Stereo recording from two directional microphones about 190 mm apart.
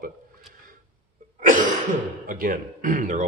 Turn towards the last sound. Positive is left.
turn(degrees=-40)  # may be behind; listen again after turning